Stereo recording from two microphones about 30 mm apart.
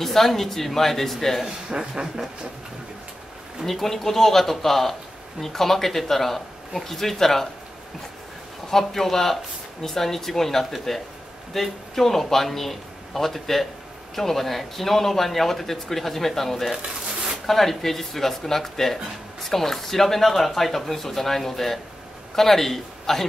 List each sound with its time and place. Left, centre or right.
0.0 s speech: centre
1.4 s speech: right
3.6 s speech: centre
8.6 s a man's voice: centre